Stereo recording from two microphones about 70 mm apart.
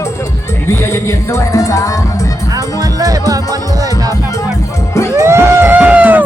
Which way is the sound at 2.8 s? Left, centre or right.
Right.